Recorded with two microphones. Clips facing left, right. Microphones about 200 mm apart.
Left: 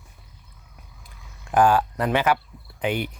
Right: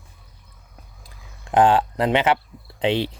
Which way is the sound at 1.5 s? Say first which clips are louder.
Right 2 dB; 20° right (ahead or behind).